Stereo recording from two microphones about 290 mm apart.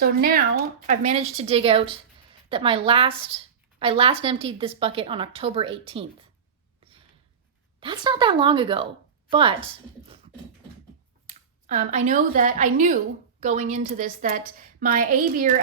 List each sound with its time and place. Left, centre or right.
0.0 s speech: right
7.8 s a woman's voice: centre
11.3 s a woman's voice: right